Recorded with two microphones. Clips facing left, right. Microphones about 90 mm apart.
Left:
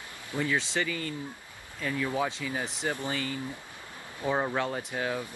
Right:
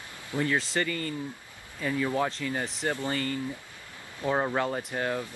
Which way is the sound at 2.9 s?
15° left (ahead or behind).